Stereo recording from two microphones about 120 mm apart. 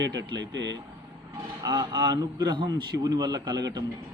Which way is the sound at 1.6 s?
30° right (ahead or behind).